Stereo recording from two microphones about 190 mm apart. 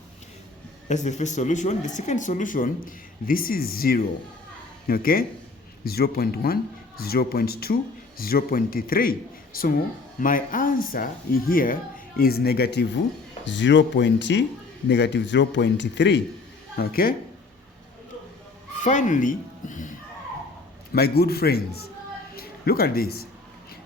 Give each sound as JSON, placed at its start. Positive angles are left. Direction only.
{"t": 0.9, "sound": "speech", "side_deg": 40}
{"t": 10.2, "sound": "speech", "side_deg": 45}
{"t": 13.4, "sound": "speech", "side_deg": 70}
{"t": 16.7, "sound": "speech", "side_deg": 50}
{"t": 18.8, "sound": "speech", "side_deg": 40}
{"t": 20.9, "sound": "a man's voice", "side_deg": 55}